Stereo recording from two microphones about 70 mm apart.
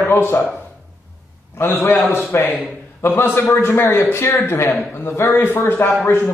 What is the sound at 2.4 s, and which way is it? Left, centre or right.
Speech, centre.